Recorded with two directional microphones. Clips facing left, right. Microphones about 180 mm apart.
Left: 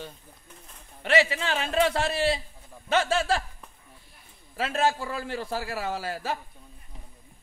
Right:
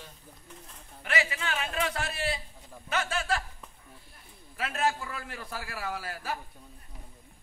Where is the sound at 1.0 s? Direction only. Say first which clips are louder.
Left 8 dB; 30° left (ahead or behind).